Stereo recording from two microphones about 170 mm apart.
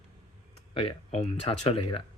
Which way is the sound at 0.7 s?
30° left (ahead or behind).